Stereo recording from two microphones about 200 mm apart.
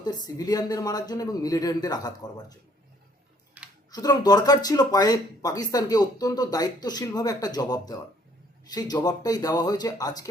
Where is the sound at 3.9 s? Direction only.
20° left (ahead or behind).